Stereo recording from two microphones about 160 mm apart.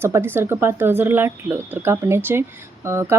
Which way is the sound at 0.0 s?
15° right (ahead or behind).